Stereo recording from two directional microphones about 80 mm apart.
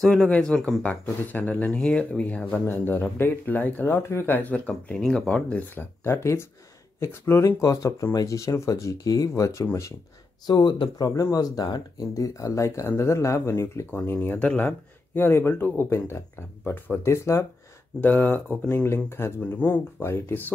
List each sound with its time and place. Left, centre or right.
0.0 s speech: centre
1.3 s speech: centre
6.0 s speech: left
10.4 s speech: left
11.1 s speech: left
11.5 s speech: left
14.5 s speech: centre
17.0 s speech: left
18.0 s speech: left
18.7 s speech: left